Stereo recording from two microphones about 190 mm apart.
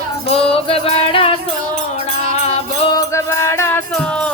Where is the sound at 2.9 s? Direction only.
15° left (ahead or behind).